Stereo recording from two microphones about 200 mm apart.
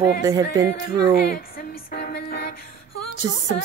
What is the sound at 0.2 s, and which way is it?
Speech, 15° right (ahead or behind).